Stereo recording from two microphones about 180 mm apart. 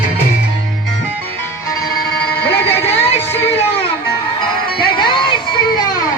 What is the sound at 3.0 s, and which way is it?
Music, 35° left (ahead or behind).